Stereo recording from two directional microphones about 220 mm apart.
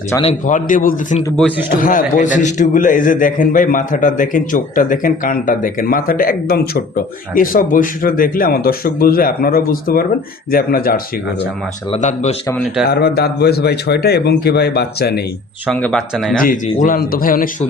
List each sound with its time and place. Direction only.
0.2 s a man's voice: 30° left (ahead or behind)
11.9 s a man's voice: 30° left (ahead or behind)
12.9 s a man's voice: 45° left (ahead or behind)
15.6 s speech: 5° left (ahead or behind)
16.4 s a man's voice: 40° left (ahead or behind)